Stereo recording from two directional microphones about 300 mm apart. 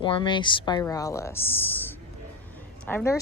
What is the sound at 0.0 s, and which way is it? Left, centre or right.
A woman's voice, centre.